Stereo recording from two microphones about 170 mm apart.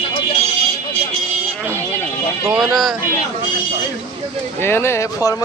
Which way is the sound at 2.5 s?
Centre (ahead or behind).